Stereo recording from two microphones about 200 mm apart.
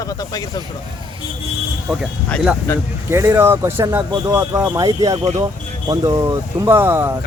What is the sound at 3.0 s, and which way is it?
Speech, 15° right (ahead or behind).